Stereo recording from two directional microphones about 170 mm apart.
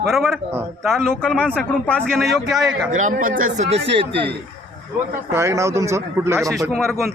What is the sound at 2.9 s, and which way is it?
Speech, 50° right (ahead or behind).